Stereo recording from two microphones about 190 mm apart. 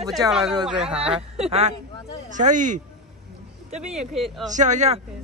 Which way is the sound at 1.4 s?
35° right (ahead or behind).